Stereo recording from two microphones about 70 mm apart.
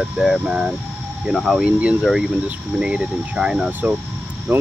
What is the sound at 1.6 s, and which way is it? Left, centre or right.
Speech, centre.